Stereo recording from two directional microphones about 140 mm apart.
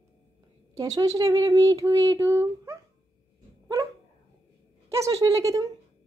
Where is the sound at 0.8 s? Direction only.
25° right (ahead or behind).